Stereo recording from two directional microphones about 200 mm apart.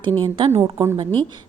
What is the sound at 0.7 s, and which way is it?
Speech, 15° right (ahead or behind).